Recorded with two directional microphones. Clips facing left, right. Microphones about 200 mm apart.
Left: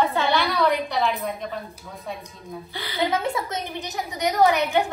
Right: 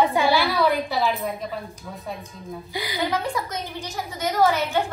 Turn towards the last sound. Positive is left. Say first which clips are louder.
# left 1 dB
turn(degrees=15)  # may be behind; listen again after turning